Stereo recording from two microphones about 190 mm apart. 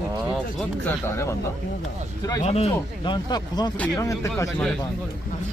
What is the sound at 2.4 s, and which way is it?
Speech, 35° left (ahead or behind).